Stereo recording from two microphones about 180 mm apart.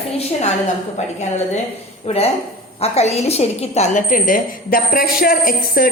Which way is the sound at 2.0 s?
35° left (ahead or behind).